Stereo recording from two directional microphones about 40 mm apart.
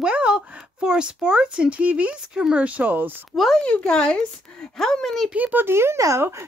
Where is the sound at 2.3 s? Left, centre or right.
Centre.